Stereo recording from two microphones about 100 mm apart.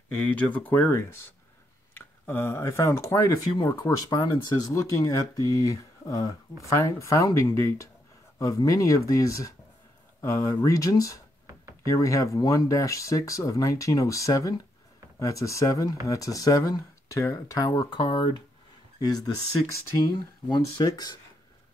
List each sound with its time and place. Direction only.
0.1 s speech: 10° left (ahead or behind); by 18.3 s 50° left (ahead or behind)
18.9 s speech: 40° left (ahead or behind)
20.4 s speech: 45° left (ahead or behind)